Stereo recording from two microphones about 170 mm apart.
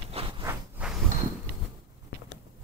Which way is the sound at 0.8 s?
10° right (ahead or behind).